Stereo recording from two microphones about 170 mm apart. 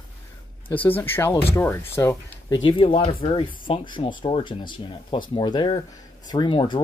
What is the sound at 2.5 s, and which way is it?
Speech, 30° left (ahead or behind).